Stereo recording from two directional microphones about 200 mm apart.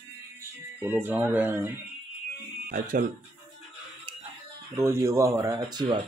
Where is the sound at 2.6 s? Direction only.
45° right (ahead or behind).